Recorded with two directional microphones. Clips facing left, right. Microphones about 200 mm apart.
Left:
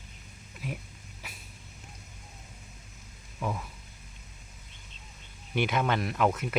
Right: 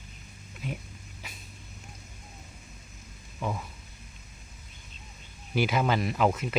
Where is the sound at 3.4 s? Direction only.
5° right (ahead or behind).